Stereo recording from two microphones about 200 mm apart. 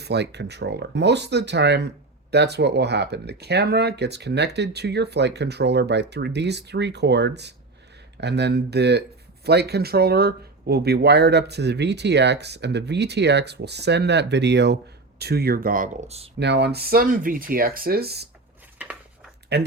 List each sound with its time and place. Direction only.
0.0 s speech: 55° right (ahead or behind); by 16.3 s 30° right (ahead or behind)
16.4 s speech: 60° right (ahead or behind)
19.5 s speech: 55° right (ahead or behind)